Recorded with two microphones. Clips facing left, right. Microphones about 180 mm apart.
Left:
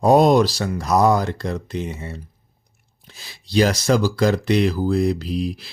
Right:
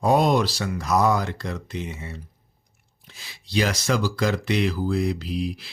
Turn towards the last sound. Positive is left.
turn(degrees=40)  # may be behind; listen again after turning